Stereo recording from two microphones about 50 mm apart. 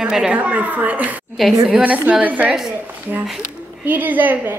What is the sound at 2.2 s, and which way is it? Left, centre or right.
Speech, right.